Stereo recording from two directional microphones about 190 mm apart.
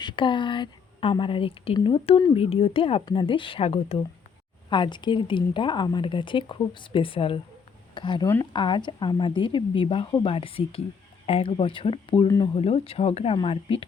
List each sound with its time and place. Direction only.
0.0 s speech: 25° left (ahead or behind)